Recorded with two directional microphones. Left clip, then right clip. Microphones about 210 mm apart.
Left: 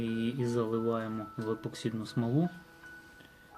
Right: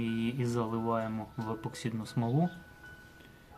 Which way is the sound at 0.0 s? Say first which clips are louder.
Left 1 dB; 25° right (ahead or behind).